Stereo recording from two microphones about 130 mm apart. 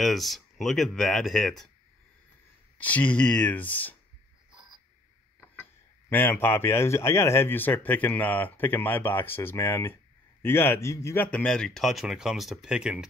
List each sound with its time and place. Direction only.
0.0 s speech: centre (ahead or behind)
2.8 s speech: 10° left (ahead or behind)
5.4 s speech: 10° left (ahead or behind); by 13.0 s 5° right (ahead or behind)